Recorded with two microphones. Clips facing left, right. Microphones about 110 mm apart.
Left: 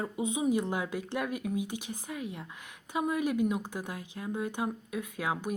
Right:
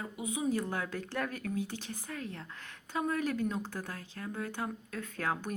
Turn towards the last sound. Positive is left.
turn(degrees=10)  # may be behind; listen again after turning